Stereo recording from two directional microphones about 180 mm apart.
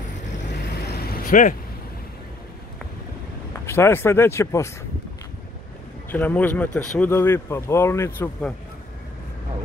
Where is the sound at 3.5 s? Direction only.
15° left (ahead or behind).